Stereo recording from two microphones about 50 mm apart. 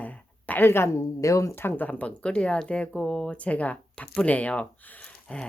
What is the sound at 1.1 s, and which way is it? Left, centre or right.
Speech, left.